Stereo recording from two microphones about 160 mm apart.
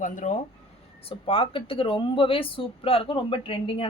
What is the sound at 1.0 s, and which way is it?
Speech, 35° left (ahead or behind).